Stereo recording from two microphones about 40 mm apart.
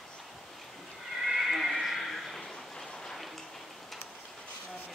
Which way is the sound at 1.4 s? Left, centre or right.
Centre.